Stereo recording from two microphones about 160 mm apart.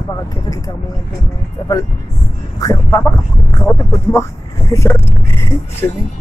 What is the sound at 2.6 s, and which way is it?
Speech, 20° left (ahead or behind).